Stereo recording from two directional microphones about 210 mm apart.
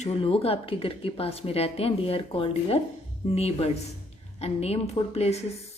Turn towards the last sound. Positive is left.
turn(degrees=30)  # may be behind; listen again after turning